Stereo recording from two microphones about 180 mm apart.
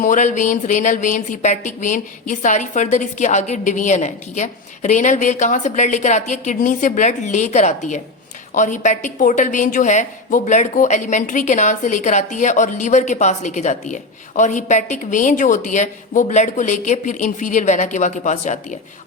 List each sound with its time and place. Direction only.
0.0 s a woman's voice: 45° left (ahead or behind)